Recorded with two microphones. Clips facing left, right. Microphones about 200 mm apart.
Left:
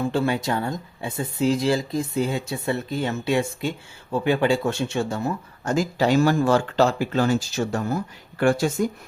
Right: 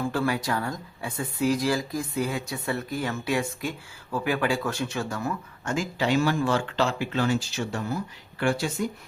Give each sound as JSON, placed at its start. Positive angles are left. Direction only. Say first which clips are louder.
{"t": 0.0, "sound": "speech", "louder": "left 4 dB", "side_deg": 25}
{"t": 5.7, "sound": "speech", "louder": "left 5 dB", "side_deg": 40}